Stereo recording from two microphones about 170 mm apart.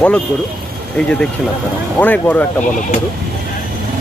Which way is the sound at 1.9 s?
10° left (ahead or behind).